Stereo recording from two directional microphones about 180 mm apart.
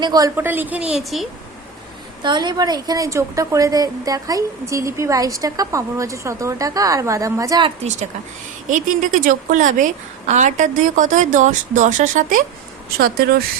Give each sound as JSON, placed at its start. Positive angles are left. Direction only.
{"t": 0.0, "sound": "a woman's voice", "side_deg": -20}
{"t": 0.3, "sound": "a woman's voice", "side_deg": -10}
{"t": 2.2, "sound": "a woman's voice", "side_deg": -25}
{"t": 7.9, "sound": "a woman's voice", "side_deg": -40}
{"t": 13.0, "sound": "speech", "side_deg": -55}